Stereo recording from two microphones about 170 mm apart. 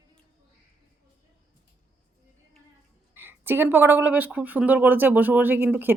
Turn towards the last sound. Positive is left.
turn(degrees=-10)  # may be behind; listen again after turning